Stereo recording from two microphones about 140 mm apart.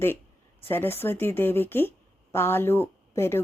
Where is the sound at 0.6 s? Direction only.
15° left (ahead or behind).